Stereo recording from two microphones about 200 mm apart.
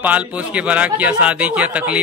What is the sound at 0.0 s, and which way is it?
A woman's voice, 5° right (ahead or behind).